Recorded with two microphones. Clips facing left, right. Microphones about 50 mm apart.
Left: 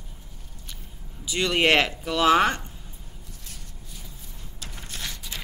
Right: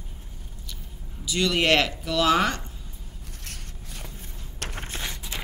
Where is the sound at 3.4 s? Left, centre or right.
Right.